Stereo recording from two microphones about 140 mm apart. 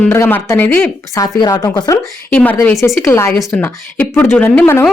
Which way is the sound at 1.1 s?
25° left (ahead or behind).